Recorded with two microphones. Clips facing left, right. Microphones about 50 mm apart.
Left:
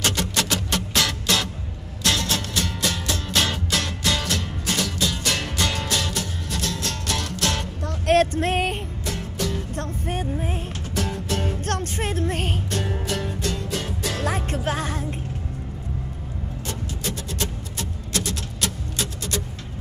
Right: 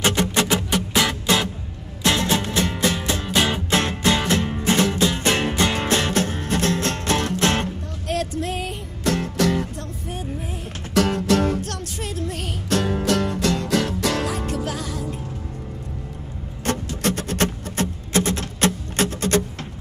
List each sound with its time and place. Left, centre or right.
0.0 s music: right
3.7 s music: right
8.1 s music: left
9.0 s music: right
9.8 s music: left
11.0 s music: right
11.6 s music: left
12.6 s music: right
14.2 s music: left
16.6 s music: right
18.1 s music: right